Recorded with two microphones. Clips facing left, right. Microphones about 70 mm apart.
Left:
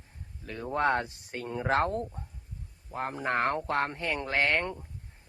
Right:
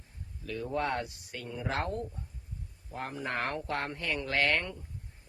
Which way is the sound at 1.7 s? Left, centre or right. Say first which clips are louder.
Left 7 dB; left.